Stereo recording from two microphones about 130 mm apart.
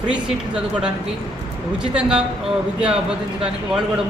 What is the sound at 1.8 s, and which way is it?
Speech, 5° right (ahead or behind).